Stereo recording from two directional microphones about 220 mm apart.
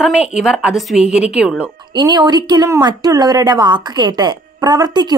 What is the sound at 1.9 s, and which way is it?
A woman's voice, 20° right (ahead or behind).